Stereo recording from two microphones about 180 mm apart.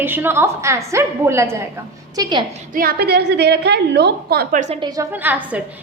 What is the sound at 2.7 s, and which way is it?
A woman's voice, 60° right (ahead or behind).